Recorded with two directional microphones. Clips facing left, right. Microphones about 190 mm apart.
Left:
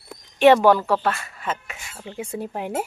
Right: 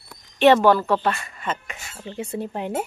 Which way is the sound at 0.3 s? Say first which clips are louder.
Left 1 dB; 10° left (ahead or behind).